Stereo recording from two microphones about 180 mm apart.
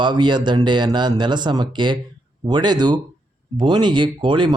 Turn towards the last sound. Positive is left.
turn(degrees=-25)  # may be behind; listen again after turning